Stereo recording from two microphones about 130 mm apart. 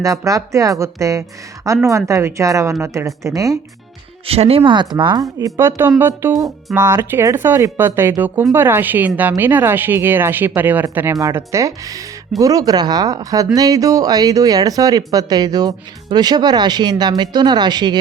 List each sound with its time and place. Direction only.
0.0 s speech: 25° right (ahead or behind)
4.3 s speech: 50° right (ahead or behind)
5.5 s speech: 20° right (ahead or behind); by 18.0 s 35° right (ahead or behind)